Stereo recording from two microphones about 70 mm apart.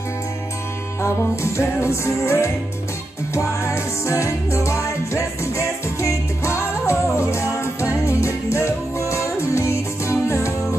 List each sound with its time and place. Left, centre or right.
1.0 s music: left